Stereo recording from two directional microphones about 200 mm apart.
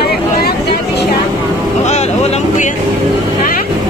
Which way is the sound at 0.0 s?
50° left (ahead or behind).